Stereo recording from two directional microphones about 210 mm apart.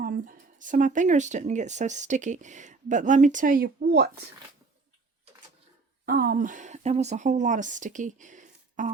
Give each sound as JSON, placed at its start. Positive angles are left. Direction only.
{"t": 0.0, "sound": "speech", "side_deg": -40}
{"t": 6.1, "sound": "speech", "side_deg": -45}